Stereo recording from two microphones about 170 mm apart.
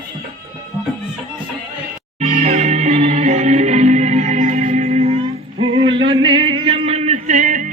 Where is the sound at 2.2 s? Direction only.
40° right (ahead or behind).